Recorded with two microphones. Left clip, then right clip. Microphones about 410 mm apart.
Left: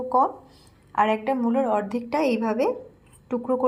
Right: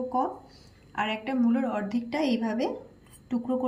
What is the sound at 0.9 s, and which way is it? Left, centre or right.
A woman's voice, centre.